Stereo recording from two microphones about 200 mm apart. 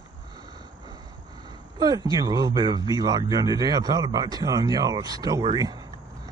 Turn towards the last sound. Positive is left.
turn(degrees=-20)  # may be behind; listen again after turning